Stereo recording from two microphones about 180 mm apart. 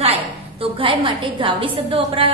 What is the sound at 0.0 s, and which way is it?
A woman's voice, 30° right (ahead or behind).